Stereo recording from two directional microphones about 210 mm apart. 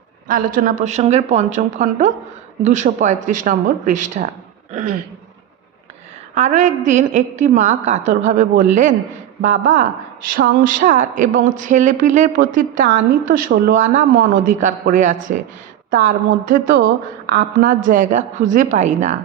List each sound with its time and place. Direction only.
0.3 s speech: 40° right (ahead or behind)
6.3 s speech: 35° right (ahead or behind)